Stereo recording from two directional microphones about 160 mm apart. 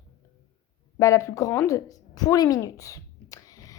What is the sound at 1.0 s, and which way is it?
A woman's voice, 20° left (ahead or behind).